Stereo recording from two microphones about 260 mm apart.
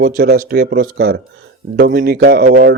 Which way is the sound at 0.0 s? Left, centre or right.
Right.